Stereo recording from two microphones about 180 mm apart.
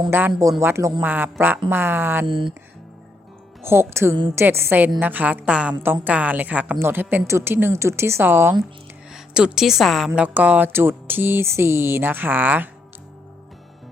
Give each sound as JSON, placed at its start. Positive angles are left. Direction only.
{"t": 0.1, "sound": "a woman's voice", "side_deg": -10}
{"t": 2.2, "sound": "speech", "side_deg": -30}
{"t": 3.6, "sound": "a woman's voice", "side_deg": -15}